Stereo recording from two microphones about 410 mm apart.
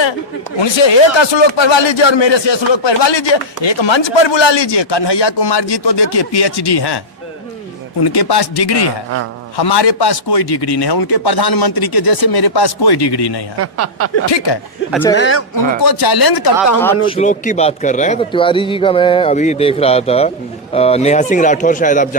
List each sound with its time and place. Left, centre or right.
0.6 s a man's voice: left
8.0 s a man's voice: left
13.6 s speech: right
14.3 s speech: left
14.8 s speech: centre
15.2 s speech: left
15.8 s a man's voice: left
17.1 s a man's voice: centre